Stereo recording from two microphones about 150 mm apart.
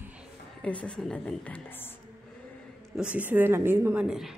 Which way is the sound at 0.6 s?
5° left (ahead or behind).